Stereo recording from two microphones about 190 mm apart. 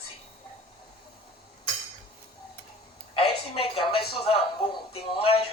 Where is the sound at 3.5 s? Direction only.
30° left (ahead or behind).